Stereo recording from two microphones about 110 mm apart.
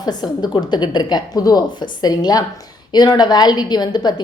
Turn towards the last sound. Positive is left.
turn(degrees=40)  # may be behind; listen again after turning